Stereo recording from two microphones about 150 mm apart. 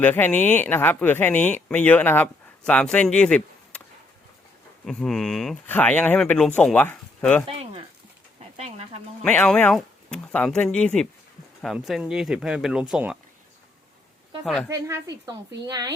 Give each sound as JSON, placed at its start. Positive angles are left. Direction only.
{"t": 0.0, "sound": "speech", "side_deg": 10}
{"t": 4.9, "sound": "speech", "side_deg": 5}
{"t": 7.4, "sound": "a sound", "side_deg": -40}
{"t": 9.2, "sound": "speech", "side_deg": 10}
{"t": 14.7, "sound": "a woman's voice", "side_deg": -20}